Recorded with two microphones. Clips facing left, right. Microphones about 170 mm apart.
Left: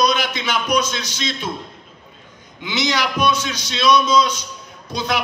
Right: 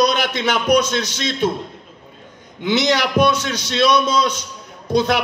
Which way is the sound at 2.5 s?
60° right (ahead or behind).